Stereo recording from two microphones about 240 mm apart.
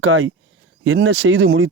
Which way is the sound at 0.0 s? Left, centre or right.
Right.